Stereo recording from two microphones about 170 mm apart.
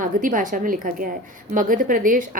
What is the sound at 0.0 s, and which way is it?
A woman's voice, 50° right (ahead or behind).